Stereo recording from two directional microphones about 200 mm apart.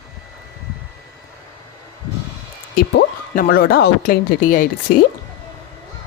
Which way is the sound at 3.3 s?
50° left (ahead or behind).